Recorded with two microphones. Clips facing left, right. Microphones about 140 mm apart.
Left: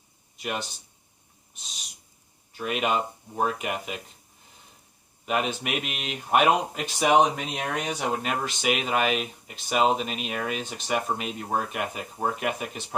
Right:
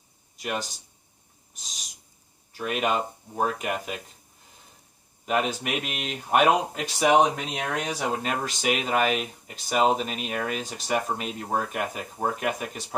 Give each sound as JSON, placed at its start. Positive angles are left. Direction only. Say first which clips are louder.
{"t": 0.3, "sound": "speech", "louder": "right 1 dB", "side_deg": -40}
{"t": 5.2, "sound": "speech", "louder": "right 1 dB", "side_deg": -40}